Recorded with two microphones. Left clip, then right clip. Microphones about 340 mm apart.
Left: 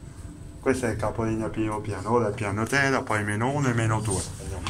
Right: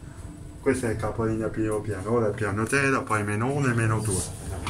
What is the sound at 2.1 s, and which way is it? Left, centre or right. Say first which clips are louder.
Speech: left 2 dB; left.